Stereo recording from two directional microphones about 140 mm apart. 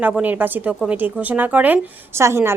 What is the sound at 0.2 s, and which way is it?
A woman's voice, 10° right (ahead or behind).